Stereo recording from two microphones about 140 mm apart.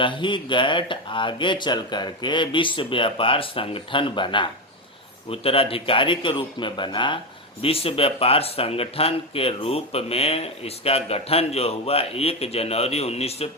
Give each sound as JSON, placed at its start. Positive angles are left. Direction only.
{"t": 0.0, "sound": "speech", "side_deg": 35}